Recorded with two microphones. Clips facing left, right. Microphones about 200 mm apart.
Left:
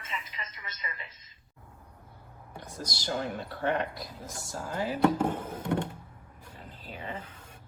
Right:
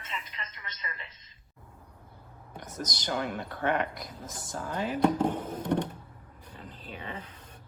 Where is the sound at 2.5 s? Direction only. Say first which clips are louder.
Right 2 dB; 20° right (ahead or behind).